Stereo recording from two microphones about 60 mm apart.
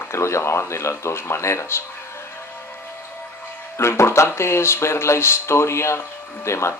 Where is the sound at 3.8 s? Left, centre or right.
Left.